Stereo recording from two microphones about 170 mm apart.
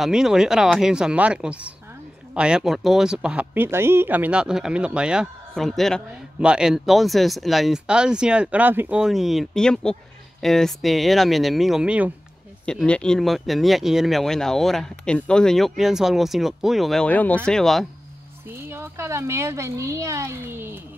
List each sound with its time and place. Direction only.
0.0 s speech: 5° right (ahead or behind)
12.6 s speech: 5° left (ahead or behind)
18.5 s speech: 15° right (ahead or behind)